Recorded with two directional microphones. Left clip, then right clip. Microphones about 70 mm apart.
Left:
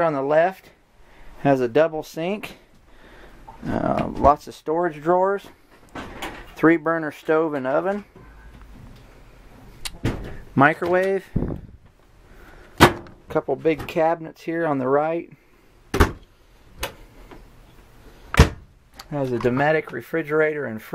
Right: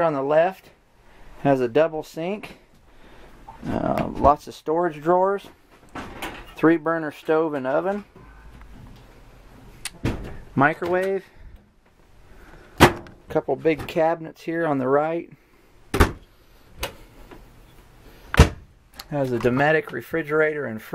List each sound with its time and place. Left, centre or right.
0.0 s speech: centre; by 2.6 s left
3.1 s roaring cats: centre
3.9 s speech: centre
5.9 s door: centre
6.5 s speech: centre
9.8 s door: centre
10.3 s door: left
10.9 s speech: left
13.3 s speech: centre
15.9 s door: centre
18.9 s speech: centre
20.0 s speech: centre